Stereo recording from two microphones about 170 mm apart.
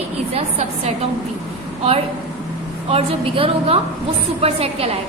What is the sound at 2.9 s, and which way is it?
A woman's voice, 35° right (ahead or behind).